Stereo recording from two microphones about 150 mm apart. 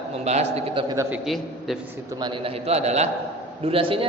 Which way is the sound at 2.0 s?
30° right (ahead or behind).